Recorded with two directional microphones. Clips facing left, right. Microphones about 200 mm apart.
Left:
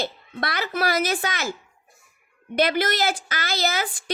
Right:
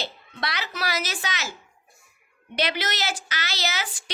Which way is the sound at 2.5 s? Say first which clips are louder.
Left 6 dB; 50° left (ahead or behind).